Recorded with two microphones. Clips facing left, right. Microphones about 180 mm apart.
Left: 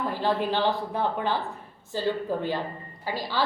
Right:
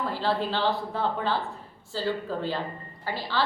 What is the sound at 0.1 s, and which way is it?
Speech, 15° left (ahead or behind).